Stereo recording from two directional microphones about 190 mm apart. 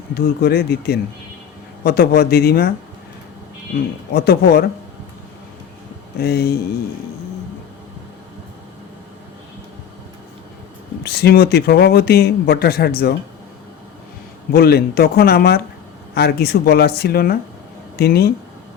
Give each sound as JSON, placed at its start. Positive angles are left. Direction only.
{"t": 0.1, "sound": "speech", "side_deg": 55}
{"t": 4.1, "sound": "speech", "side_deg": 55}
{"t": 6.1, "sound": "speech", "side_deg": 55}
{"t": 11.0, "sound": "speech", "side_deg": 60}
{"t": 14.5, "sound": "speech", "side_deg": 55}